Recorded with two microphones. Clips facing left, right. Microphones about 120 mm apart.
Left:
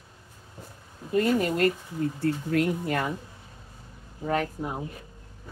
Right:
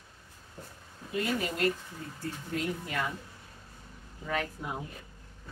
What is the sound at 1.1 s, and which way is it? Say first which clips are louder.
Speech: left 8 dB; 45° left (ahead or behind).